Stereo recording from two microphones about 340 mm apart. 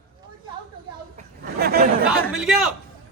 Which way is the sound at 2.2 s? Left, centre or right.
Centre.